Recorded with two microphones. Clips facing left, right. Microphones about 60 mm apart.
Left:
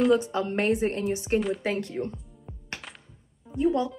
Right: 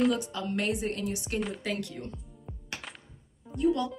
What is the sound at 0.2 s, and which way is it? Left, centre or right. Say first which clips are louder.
A woman's voice: left 5 dB; left.